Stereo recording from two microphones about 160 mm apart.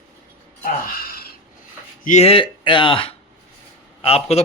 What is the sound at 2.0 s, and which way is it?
A man's voice, 45° left (ahead or behind).